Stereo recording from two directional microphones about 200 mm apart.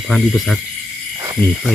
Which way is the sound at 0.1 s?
Centre (ahead or behind).